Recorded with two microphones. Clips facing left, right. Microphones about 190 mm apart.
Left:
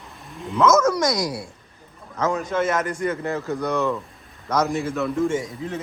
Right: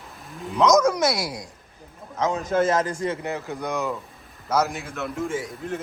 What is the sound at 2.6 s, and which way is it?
Speech, 30° right (ahead or behind).